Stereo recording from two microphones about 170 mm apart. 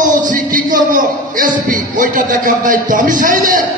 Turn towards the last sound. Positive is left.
turn(degrees=-55)  # may be behind; listen again after turning